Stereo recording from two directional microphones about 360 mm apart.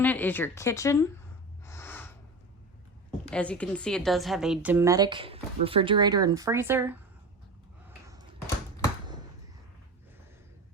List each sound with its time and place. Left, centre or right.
0.0 s speech: centre
1.6 s snort: centre
3.2 s a woman's voice: centre
7.9 s a sound: centre